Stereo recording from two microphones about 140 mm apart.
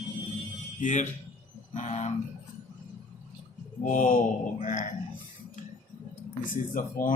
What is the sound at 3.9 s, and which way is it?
Mantra, 70° left (ahead or behind).